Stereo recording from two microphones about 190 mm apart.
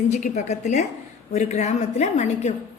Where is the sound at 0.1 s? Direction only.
40° left (ahead or behind).